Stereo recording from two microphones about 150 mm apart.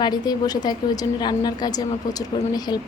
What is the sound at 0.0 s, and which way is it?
A woman's voice, 25° left (ahead or behind).